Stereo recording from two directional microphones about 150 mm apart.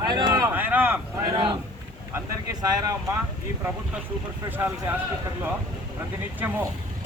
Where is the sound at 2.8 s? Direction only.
20° right (ahead or behind).